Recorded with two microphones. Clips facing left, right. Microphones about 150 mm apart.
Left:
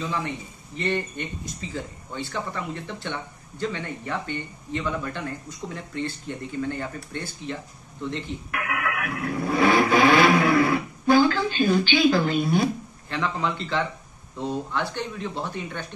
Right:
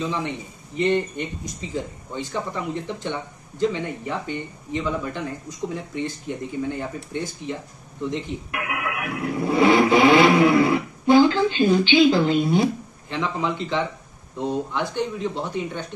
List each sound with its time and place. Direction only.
0.0 s speech: 15° right (ahead or behind)